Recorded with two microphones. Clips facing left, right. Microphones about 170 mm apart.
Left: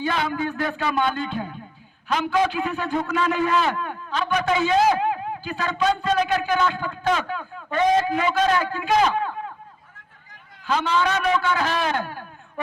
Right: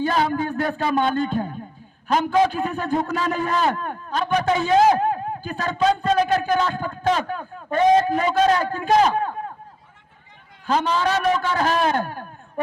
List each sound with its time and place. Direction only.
0.0 s a man's voice: 40° right (ahead or behind)
10.7 s a man's voice: 40° right (ahead or behind)